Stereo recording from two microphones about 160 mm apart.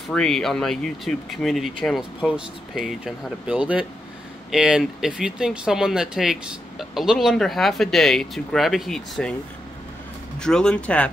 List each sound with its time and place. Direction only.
0.1 s speech: 5° left (ahead or behind)
10.4 s speech: 5° left (ahead or behind)